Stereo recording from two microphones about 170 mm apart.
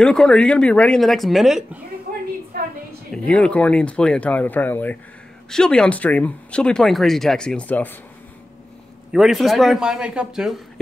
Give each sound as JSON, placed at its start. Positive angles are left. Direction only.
{"t": 0.0, "sound": "speech", "side_deg": 5}
{"t": 2.1, "sound": "a sound", "side_deg": -55}
{"t": 3.3, "sound": "speech", "side_deg": 5}
{"t": 9.1, "sound": "speech", "side_deg": 0}